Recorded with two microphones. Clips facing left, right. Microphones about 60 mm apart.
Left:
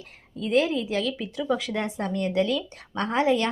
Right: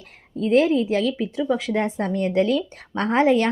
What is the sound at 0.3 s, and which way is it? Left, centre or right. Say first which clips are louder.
Speech: right 5 dB; right.